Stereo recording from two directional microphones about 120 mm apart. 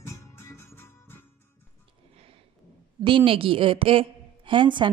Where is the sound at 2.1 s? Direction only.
55° right (ahead or behind).